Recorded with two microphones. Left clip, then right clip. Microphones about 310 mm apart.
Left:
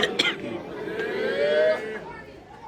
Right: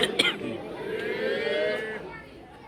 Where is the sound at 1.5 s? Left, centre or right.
Left.